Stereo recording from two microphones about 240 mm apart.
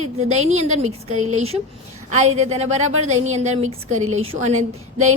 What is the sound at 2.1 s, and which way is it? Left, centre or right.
A woman's voice, right.